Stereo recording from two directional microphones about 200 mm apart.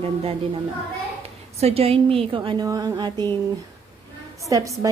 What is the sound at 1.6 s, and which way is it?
Speech, 30° right (ahead or behind).